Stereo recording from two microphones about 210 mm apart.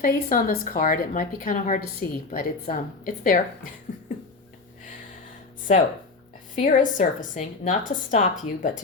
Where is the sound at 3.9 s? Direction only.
35° left (ahead or behind).